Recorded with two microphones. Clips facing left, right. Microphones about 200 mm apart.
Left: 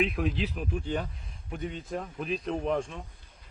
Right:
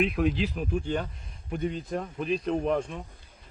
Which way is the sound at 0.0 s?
Centre (ahead or behind).